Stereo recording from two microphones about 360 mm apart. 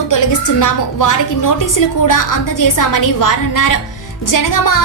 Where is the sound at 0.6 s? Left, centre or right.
Left.